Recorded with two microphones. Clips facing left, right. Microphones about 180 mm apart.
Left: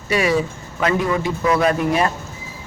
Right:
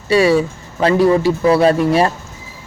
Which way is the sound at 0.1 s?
30° right (ahead or behind).